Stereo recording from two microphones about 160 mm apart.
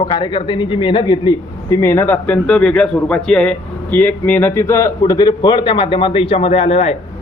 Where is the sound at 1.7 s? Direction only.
15° left (ahead or behind).